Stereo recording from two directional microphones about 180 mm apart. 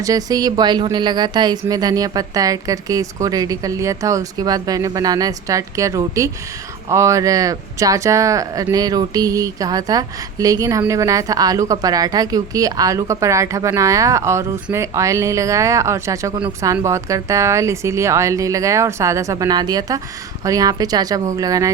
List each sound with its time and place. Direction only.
0.0 s speech: 20° right (ahead or behind)